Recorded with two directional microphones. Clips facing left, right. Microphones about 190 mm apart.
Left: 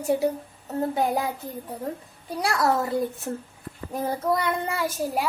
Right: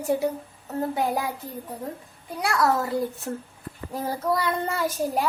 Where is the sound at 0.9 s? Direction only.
20° left (ahead or behind).